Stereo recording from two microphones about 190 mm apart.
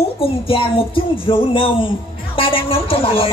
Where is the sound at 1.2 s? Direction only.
25° left (ahead or behind).